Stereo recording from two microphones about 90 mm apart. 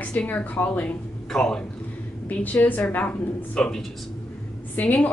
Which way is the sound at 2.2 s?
20° left (ahead or behind).